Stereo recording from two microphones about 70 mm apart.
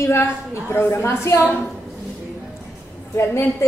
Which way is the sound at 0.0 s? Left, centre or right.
Left.